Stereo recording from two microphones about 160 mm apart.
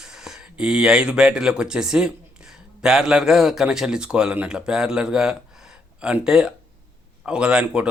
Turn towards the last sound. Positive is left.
turn(degrees=-5)  # may be behind; listen again after turning